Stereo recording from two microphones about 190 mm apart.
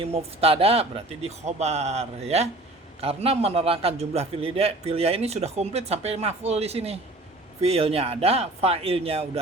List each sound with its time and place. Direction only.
0.0 s a man's voice: 30° right (ahead or behind)